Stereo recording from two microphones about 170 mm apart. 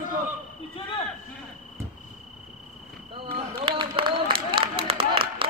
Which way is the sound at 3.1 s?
30° right (ahead or behind).